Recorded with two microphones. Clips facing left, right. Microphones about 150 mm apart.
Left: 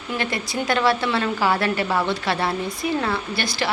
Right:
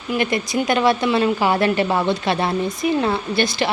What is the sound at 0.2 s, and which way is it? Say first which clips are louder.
A woman's voice: right 6 dB; 20° right (ahead or behind).